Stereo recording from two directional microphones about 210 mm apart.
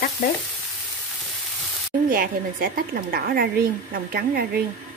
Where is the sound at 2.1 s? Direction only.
40° right (ahead or behind).